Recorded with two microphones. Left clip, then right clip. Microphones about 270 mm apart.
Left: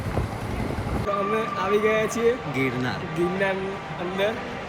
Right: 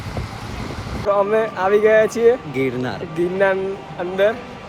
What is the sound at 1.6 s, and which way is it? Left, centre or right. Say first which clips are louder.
Speech: right 9 dB; right.